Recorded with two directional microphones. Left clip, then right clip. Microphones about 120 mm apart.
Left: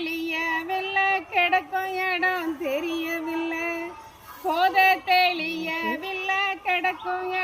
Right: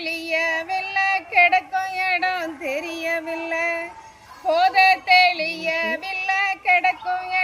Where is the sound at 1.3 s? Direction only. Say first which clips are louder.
Right 5 dB; 40° right (ahead or behind).